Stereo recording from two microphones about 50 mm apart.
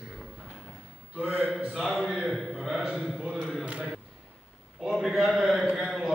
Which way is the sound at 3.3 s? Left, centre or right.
Centre.